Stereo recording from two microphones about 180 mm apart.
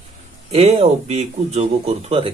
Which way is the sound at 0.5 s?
35° right (ahead or behind).